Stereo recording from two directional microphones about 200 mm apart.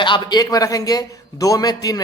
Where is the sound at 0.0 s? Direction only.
20° left (ahead or behind).